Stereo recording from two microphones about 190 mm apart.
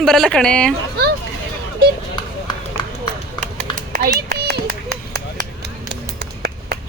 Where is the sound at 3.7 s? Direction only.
45° right (ahead or behind).